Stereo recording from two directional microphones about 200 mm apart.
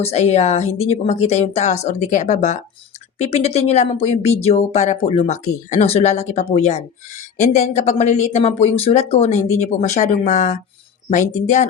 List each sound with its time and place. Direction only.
0.0 s speech: 30° left (ahead or behind)